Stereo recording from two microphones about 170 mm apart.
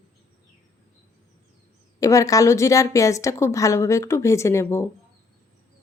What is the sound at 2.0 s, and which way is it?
A woman's voice, 20° left (ahead or behind).